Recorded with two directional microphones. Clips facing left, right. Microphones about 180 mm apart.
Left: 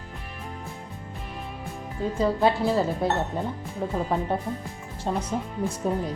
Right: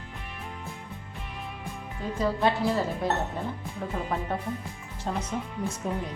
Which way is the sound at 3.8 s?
30° left (ahead or behind).